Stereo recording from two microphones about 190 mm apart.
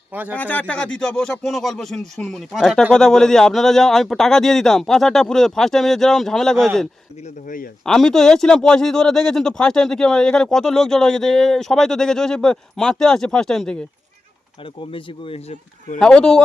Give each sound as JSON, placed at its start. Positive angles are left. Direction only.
{"t": 0.1, "sound": "speech", "side_deg": -10}
{"t": 0.3, "sound": "speech", "side_deg": 10}
{"t": 7.4, "sound": "speech", "side_deg": 45}
{"t": 7.9, "sound": "speech", "side_deg": 5}
{"t": 14.6, "sound": "speech", "side_deg": 25}
{"t": 16.0, "sound": "speech", "side_deg": 5}